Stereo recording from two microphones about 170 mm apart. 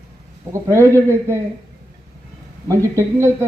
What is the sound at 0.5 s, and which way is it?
Speech, 15° right (ahead or behind).